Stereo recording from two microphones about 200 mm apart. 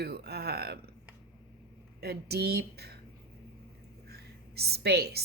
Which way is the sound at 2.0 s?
50° right (ahead or behind).